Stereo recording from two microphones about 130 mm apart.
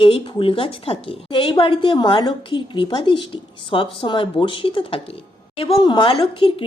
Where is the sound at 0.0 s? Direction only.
45° left (ahead or behind).